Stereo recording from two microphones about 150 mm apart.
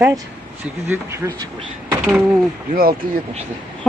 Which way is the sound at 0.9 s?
20° right (ahead or behind).